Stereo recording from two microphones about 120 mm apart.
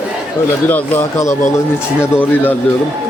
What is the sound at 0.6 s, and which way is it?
Speech, 15° left (ahead or behind).